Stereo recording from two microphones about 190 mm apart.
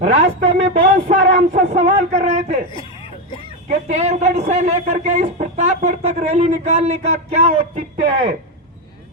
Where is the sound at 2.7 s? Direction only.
25° left (ahead or behind).